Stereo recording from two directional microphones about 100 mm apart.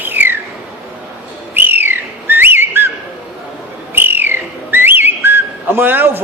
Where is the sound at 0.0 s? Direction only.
20° right (ahead or behind).